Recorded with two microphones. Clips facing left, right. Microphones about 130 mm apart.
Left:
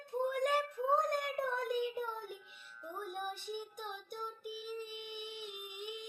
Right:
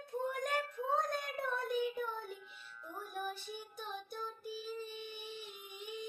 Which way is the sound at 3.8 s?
15° left (ahead or behind).